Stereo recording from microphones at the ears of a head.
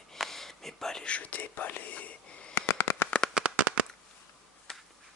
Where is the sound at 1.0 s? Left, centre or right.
Left.